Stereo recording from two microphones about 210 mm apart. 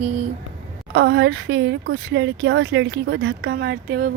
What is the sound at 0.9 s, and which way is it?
Speech, 60° right (ahead or behind).